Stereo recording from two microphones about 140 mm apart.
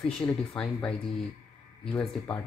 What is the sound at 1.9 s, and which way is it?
Speech, 10° left (ahead or behind).